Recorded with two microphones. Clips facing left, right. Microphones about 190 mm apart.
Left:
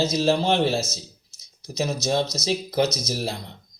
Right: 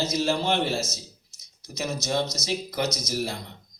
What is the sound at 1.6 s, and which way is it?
Speech, 35° left (ahead or behind).